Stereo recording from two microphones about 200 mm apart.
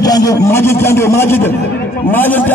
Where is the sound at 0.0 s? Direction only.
20° left (ahead or behind).